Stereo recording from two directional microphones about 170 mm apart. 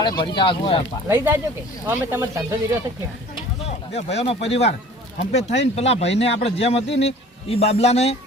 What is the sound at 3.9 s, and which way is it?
Speech, 40° left (ahead or behind).